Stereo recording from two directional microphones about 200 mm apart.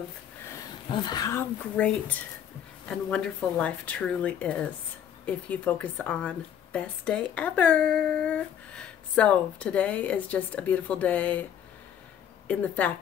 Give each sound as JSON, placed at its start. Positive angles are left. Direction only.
{"t": 0.5, "sound": "a sound", "side_deg": 20}
{"t": 1.8, "sound": "a woman's voice", "side_deg": 5}
{"t": 12.4, "sound": "a woman's voice", "side_deg": 5}